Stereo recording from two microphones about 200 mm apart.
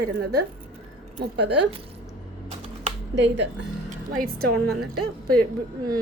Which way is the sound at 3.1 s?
60° right (ahead or behind).